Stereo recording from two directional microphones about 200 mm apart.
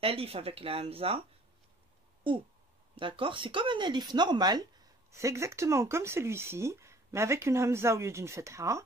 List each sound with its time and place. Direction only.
0.0 s speech: 30° right (ahead or behind)
3.0 s speech: 25° right (ahead or behind)